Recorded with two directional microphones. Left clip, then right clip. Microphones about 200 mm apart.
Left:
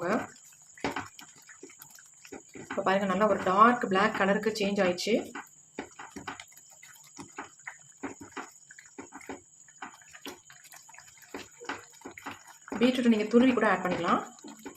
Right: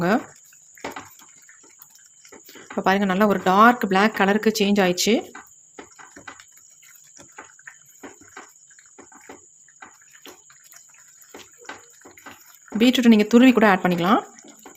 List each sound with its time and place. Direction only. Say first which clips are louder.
2.8 s speech: right 7 dB; 50° right (ahead or behind)
12.8 s speech: right 9 dB; 55° right (ahead or behind)